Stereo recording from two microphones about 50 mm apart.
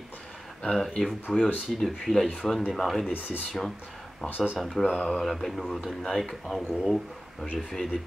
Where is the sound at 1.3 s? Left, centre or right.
Centre.